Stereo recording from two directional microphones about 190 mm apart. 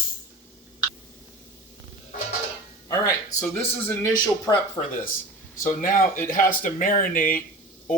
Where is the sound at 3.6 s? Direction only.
10° left (ahead or behind).